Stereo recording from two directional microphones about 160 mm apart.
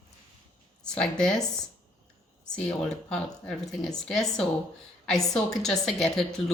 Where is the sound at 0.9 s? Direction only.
5° left (ahead or behind).